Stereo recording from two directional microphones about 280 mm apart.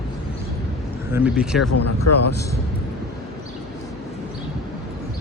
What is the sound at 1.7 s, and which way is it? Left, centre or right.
Speech, left.